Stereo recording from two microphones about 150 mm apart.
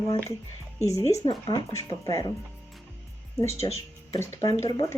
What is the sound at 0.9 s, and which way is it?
Speech, 20° left (ahead or behind).